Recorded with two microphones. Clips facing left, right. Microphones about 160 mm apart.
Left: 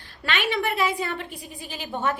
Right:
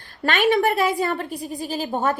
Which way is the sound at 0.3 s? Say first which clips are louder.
Right 7 dB; 45° right (ahead or behind).